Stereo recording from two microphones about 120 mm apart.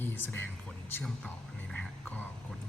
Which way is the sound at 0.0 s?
15° left (ahead or behind).